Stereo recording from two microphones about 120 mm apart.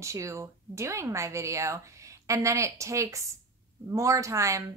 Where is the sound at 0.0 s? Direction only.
25° right (ahead or behind).